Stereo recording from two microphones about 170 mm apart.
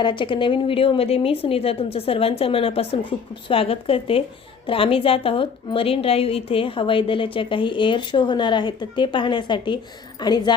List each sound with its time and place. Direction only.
0.0 s a woman's voice: 30° left (ahead or behind)